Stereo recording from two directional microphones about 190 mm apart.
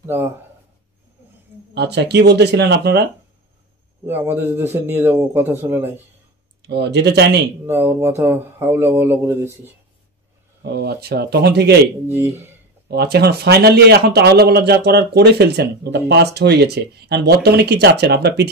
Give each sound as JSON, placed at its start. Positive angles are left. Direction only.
{"t": 0.0, "sound": "speech", "side_deg": -15}
{"t": 1.7, "sound": "speech", "side_deg": -60}
{"t": 4.0, "sound": "a man's voice", "side_deg": -10}
{"t": 6.7, "sound": "speech", "side_deg": -60}
{"t": 7.6, "sound": "a man's voice", "side_deg": -10}
{"t": 10.6, "sound": "speech", "side_deg": -60}
{"t": 12.1, "sound": "a man's voice", "side_deg": -15}
{"t": 12.8, "sound": "speech", "side_deg": -60}